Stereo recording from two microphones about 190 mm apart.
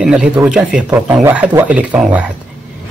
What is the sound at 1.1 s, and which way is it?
Speech, 15° right (ahead or behind).